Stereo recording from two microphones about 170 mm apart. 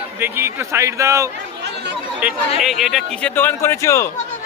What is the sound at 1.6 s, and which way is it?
Chatter, 80° right.